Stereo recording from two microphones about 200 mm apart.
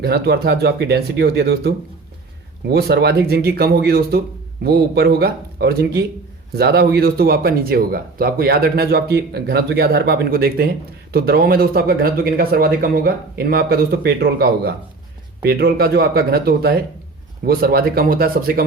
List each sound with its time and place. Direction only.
0.0 s speech: 55° right (ahead or behind)